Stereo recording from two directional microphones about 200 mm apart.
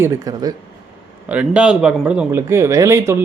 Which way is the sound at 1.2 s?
5° right (ahead or behind).